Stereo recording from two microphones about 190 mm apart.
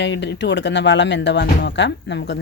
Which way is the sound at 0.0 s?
65° left (ahead or behind).